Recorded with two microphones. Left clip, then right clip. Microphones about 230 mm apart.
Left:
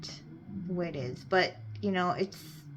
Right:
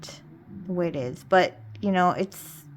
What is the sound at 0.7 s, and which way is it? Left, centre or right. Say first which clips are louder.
Speech: right 8 dB; right.